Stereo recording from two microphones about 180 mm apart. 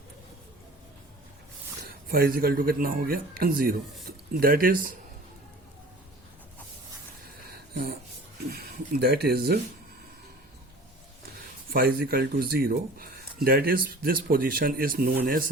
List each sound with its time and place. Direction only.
1.9 s speech: 60° right (ahead or behind)
7.7 s speech: 60° right (ahead or behind)
11.7 s speech: 60° right (ahead or behind)